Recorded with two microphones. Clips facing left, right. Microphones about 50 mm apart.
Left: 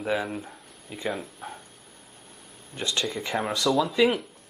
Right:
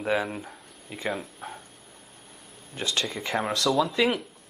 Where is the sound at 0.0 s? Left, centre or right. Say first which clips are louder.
Right 1 dB; centre.